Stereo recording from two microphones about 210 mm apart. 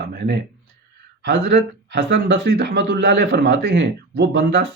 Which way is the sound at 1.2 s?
55° right (ahead or behind).